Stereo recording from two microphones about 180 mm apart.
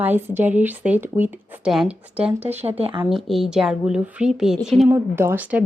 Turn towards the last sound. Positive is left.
turn(degrees=-10)  # may be behind; listen again after turning